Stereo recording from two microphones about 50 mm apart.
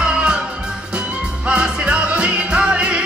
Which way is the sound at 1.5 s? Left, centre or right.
Centre.